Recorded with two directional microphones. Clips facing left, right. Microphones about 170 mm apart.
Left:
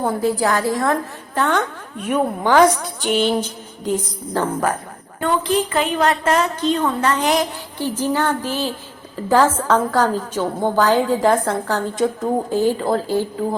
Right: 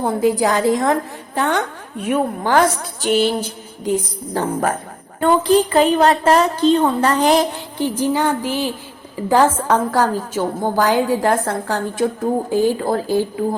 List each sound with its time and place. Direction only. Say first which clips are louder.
0.0 s a woman's voice: right 2 dB; 15° right (ahead or behind)
5.2 s a woman's voice: right 5 dB; 35° right (ahead or behind)
7.8 s a woman's voice: right 2 dB; 15° right (ahead or behind)